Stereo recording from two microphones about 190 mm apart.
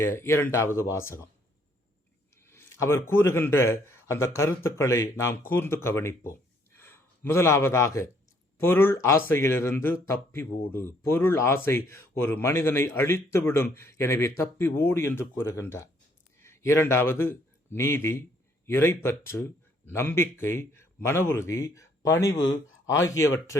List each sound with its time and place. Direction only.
0.0 s speech: 15° left (ahead or behind)
2.5 s a man's voice: 15° left (ahead or behind)